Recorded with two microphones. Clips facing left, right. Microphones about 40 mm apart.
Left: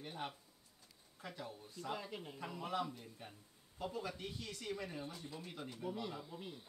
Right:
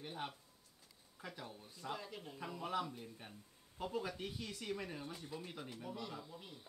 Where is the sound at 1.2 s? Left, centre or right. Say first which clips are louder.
Left 1 dB; centre.